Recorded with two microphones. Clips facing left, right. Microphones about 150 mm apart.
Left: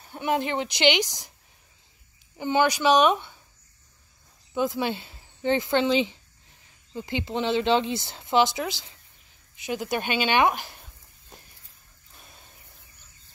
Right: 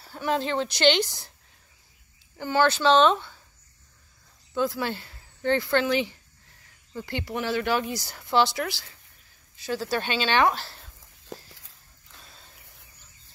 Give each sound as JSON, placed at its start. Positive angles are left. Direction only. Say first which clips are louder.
{"t": 0.0, "sound": "a woman's voice", "louder": "left 1 dB", "side_deg": 20}
{"t": 2.3, "sound": "a woman's voice", "louder": "even", "side_deg": 15}
{"t": 4.6, "sound": "a woman's voice", "louder": "left 1 dB", "side_deg": 20}
{"t": 11.3, "sound": "a sound", "louder": "right 11 dB", "side_deg": -90}